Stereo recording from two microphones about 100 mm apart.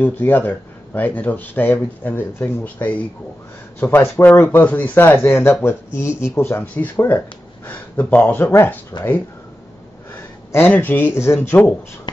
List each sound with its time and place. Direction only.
0.0 s speech: 20° left (ahead or behind)
8.9 s speech: 45° left (ahead or behind)
10.1 s speech: 20° left (ahead or behind)